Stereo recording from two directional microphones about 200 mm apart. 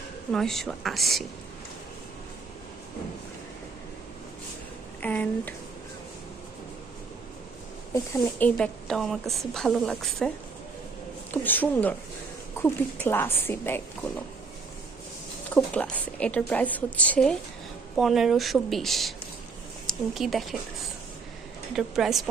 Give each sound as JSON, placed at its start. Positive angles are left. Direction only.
{"t": 0.3, "sound": "a woman's voice", "side_deg": 0}
{"t": 5.0, "sound": "a woman's voice", "side_deg": 10}
{"t": 7.9, "sound": "a woman's voice", "side_deg": 15}
{"t": 11.4, "sound": "a woman's voice", "side_deg": 10}
{"t": 15.5, "sound": "a woman's voice", "side_deg": 5}
{"t": 21.8, "sound": "a woman's voice", "side_deg": 0}